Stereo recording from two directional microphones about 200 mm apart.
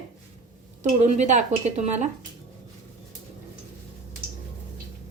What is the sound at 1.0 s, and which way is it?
A woman's voice, 35° right (ahead or behind).